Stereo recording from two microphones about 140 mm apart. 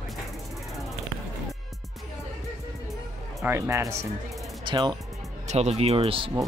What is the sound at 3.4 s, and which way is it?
Speech, 20° right (ahead or behind).